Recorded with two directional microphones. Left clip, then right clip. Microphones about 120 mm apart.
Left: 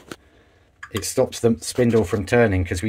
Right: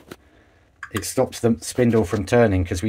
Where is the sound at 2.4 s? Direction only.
10° right (ahead or behind).